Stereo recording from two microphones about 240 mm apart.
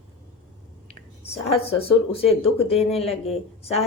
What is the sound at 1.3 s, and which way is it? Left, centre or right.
A woman's voice, left.